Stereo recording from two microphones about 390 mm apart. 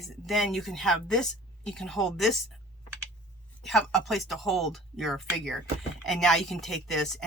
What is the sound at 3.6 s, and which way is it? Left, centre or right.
Speech, centre.